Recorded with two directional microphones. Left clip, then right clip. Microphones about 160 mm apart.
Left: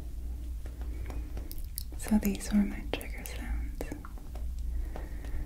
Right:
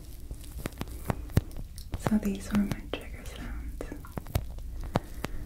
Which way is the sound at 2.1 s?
20° left (ahead or behind).